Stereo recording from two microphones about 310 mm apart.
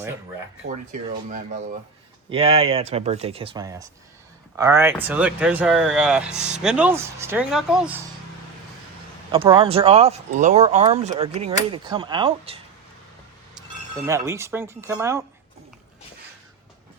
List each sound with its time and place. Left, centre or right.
2.3 s speech: centre
9.3 s speech: centre
14.1 s speech: centre